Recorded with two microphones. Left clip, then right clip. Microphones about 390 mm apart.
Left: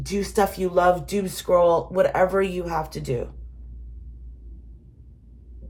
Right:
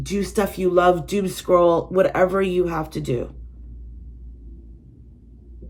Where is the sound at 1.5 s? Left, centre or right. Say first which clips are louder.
Right 2 dB; left.